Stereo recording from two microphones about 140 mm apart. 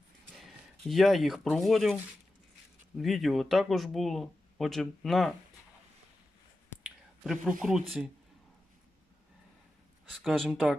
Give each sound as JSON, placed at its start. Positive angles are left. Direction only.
{"t": 0.3, "sound": "speech", "side_deg": 0}
{"t": 3.0, "sound": "speech", "side_deg": 0}
{"t": 6.8, "sound": "a sound", "side_deg": -5}
{"t": 7.6, "sound": "speech", "side_deg": 0}
{"t": 10.1, "sound": "speech", "side_deg": 0}